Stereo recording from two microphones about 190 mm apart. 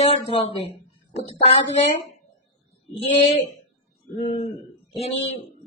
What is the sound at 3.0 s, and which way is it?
A woman's voice, 35° left (ahead or behind).